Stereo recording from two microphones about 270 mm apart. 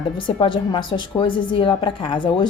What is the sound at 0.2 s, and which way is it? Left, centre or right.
A woman's voice, centre.